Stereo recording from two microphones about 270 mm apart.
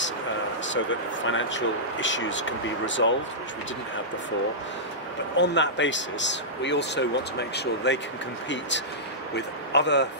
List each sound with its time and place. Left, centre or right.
0.7 s speech: left
5.4 s a man's voice: left